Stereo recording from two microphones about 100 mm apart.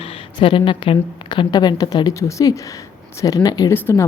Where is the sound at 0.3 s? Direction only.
55° left (ahead or behind); by 3.7 s 40° left (ahead or behind).